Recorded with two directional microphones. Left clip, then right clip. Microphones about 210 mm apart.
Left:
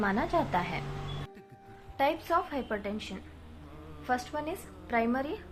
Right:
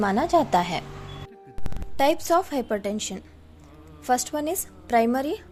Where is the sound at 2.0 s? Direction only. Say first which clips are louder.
Right 7 dB; 45° right (ahead or behind).